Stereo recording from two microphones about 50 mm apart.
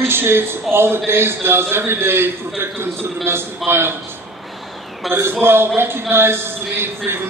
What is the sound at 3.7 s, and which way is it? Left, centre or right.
Speech, right.